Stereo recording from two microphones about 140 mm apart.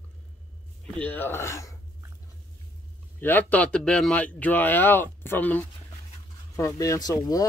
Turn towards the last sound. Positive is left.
turn(degrees=25)  # may be behind; listen again after turning